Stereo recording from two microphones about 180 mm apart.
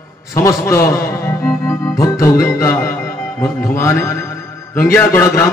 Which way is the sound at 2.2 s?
15° left (ahead or behind).